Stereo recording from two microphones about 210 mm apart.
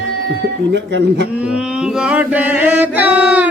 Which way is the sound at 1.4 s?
5° right (ahead or behind).